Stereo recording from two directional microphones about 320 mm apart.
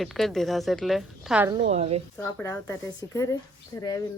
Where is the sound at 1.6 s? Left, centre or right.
Centre.